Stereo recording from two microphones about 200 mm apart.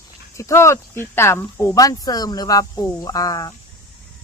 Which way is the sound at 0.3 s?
15° left (ahead or behind).